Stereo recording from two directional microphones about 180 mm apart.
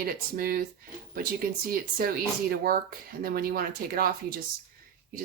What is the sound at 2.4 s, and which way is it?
Speech, 55° right (ahead or behind).